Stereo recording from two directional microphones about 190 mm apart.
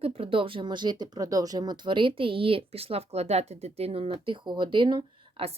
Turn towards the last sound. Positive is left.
turn(degrees=-25)  # may be behind; listen again after turning